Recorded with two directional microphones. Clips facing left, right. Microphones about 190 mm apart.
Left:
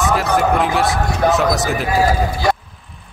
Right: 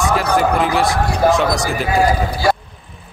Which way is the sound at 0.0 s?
Centre (ahead or behind).